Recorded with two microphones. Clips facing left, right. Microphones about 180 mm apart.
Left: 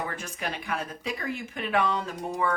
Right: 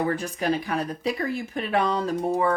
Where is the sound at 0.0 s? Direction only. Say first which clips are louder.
Right 8 dB; 35° right (ahead or behind).